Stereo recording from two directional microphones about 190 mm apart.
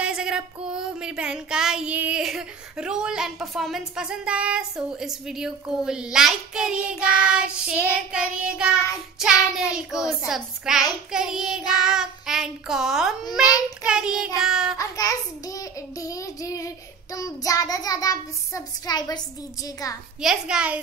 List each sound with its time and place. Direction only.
0.0 s music: 5° right (ahead or behind)
13.4 s a child's voice: 20° left (ahead or behind)
13.8 s music: 5° right (ahead or behind)
14.8 s child singing: 20° left (ahead or behind)
20.2 s music: 5° right (ahead or behind)